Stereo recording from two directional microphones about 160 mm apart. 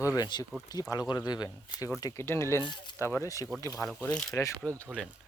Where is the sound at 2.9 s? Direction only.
15° left (ahead or behind).